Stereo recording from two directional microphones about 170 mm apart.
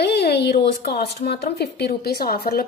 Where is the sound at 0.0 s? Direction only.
75° left (ahead or behind).